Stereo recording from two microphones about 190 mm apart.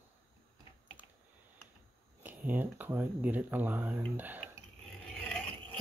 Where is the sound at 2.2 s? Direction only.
10° right (ahead or behind).